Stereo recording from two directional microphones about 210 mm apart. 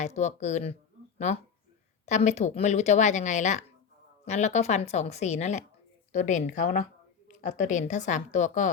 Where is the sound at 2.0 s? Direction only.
35° left (ahead or behind).